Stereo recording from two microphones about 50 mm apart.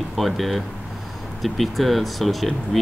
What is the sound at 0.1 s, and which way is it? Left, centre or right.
Speech, centre.